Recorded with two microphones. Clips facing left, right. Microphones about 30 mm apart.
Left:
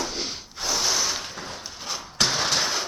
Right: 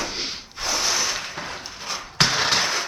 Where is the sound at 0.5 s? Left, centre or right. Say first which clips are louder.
Right 1 dB; centre.